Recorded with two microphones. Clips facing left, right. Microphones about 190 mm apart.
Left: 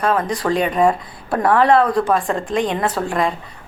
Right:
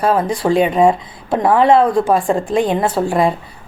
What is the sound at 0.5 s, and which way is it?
Speech, 5° right (ahead or behind).